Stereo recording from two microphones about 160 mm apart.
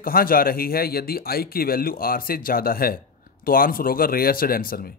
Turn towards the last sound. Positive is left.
turn(degrees=65)  # may be behind; listen again after turning